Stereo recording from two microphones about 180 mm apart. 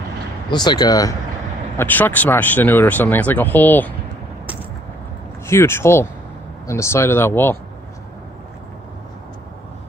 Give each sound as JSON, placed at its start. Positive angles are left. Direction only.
{"t": 0.5, "sound": "speech", "side_deg": 25}
{"t": 5.5, "sound": "speech", "side_deg": 15}